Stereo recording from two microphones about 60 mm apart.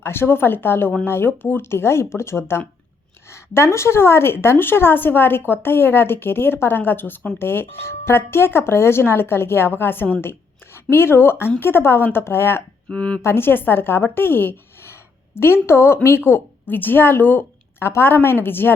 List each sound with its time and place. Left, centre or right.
0.0 s speech: left
12.9 s speech: centre
13.2 s speech: left